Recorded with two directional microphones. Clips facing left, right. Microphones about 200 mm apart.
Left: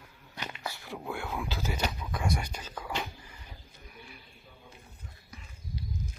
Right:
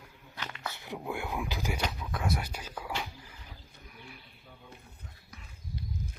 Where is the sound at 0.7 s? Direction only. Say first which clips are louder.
Right 1 dB; 20° right (ahead or behind).